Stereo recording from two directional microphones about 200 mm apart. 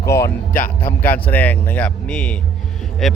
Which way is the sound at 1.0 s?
10° left (ahead or behind).